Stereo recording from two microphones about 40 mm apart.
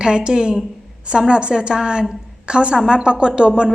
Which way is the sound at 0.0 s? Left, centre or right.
Right.